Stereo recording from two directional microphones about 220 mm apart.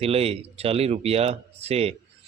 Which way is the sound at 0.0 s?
25° right (ahead or behind).